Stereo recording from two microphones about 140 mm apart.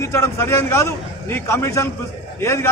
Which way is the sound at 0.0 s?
20° left (ahead or behind).